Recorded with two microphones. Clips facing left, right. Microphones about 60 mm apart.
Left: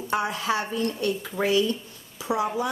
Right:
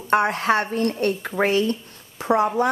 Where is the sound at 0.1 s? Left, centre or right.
Right.